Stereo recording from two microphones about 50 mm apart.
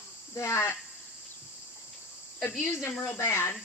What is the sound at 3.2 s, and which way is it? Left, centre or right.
Speech, left.